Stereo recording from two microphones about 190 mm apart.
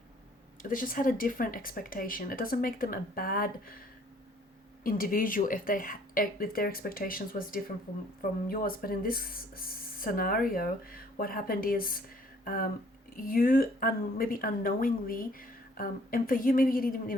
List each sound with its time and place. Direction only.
0.6 s speech: 45° left (ahead or behind)